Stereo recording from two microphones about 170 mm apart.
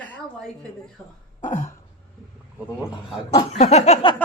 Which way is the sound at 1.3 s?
45° left (ahead or behind).